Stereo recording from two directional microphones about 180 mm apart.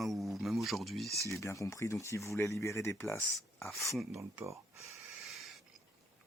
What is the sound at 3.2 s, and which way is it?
Speech, centre (ahead or behind).